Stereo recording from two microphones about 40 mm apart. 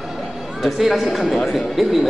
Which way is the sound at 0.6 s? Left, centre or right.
Centre.